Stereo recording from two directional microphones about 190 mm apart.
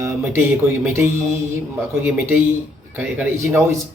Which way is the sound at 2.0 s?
10° right (ahead or behind).